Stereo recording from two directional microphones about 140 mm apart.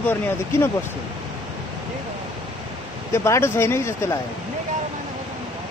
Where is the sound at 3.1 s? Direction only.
20° left (ahead or behind).